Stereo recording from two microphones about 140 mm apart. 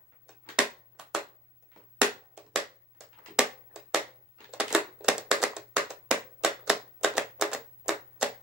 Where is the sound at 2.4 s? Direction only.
5° right (ahead or behind).